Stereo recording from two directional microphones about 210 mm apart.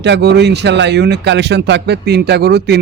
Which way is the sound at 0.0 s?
55° right (ahead or behind).